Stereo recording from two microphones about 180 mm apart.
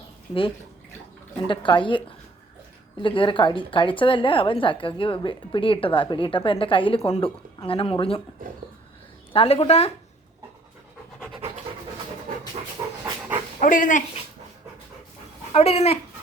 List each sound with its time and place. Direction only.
1.5 s speech: 25° left (ahead or behind)
9.3 s speech: 30° left (ahead or behind)
11.3 s pant: 30° right (ahead or behind)
12.8 s dog: 25° right (ahead or behind)
13.6 s speech: 45° left (ahead or behind)
15.5 s speech: 35° left (ahead or behind)